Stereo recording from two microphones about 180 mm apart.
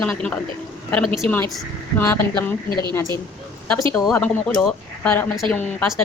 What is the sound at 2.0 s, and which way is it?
Speech, 10° left (ahead or behind).